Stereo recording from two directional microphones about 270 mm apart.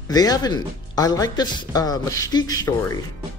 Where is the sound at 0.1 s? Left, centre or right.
Centre.